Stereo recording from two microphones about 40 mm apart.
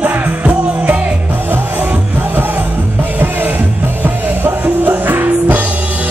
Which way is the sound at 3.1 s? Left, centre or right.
Right.